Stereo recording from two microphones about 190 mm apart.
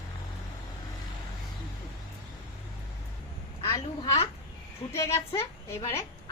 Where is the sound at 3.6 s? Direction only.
20° left (ahead or behind).